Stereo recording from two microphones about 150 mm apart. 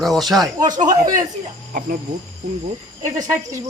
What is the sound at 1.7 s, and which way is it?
Speech, 70° right (ahead or behind).